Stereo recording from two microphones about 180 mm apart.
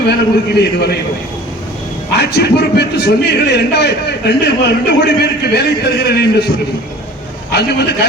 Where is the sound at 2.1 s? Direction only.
70° left (ahead or behind).